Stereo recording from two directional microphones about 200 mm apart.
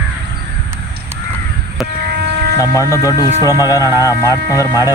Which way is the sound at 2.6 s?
15° left (ahead or behind).